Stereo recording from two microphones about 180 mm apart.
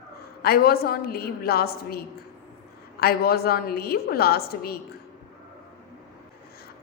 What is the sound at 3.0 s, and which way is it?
A woman's voice, 60° left (ahead or behind).